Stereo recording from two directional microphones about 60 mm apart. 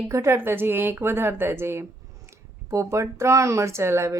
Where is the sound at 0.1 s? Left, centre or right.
Right.